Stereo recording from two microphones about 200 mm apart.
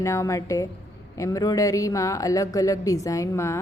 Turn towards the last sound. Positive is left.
turn(degrees=15)  # may be behind; listen again after turning